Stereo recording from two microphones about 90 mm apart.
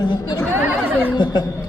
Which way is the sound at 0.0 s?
55° left (ahead or behind).